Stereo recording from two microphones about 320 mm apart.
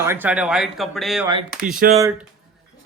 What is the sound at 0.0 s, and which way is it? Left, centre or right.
Speech, centre.